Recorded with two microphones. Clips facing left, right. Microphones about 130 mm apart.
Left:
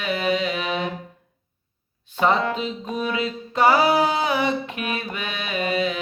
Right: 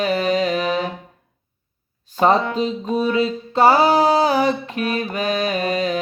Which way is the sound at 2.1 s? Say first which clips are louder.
Right 4 dB; 35° right (ahead or behind).